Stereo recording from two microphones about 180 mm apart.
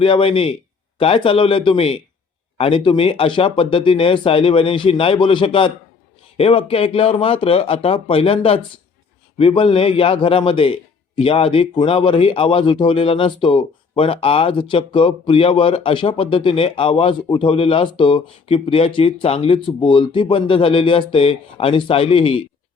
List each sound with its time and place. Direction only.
0.0 s a man's voice: 30° left (ahead or behind)